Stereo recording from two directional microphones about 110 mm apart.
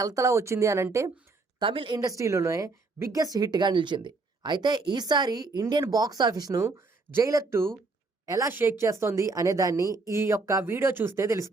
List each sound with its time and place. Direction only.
0.0 s speech: 30° right (ahead or behind)
1.5 s speech: 50° right (ahead or behind)
2.0 s a woman's voice: 30° right (ahead or behind)